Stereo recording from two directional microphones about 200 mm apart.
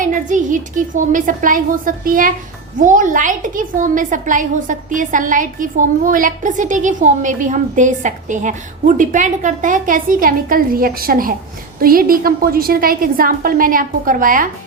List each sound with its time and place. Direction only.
0.0 s a woman's voice: 40° right (ahead or behind)